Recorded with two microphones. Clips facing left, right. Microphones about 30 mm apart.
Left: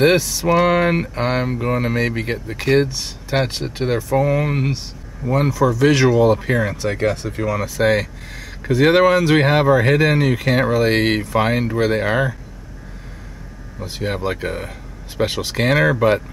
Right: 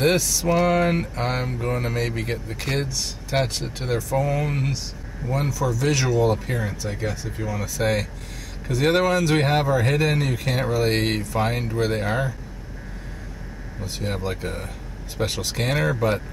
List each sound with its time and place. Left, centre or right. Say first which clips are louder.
0.0 s speech: left 5 dB; left
5.5 s speech: left 9 dB; left
6.8 s speech: left 9 dB; left
13.9 s speech: left 6 dB; left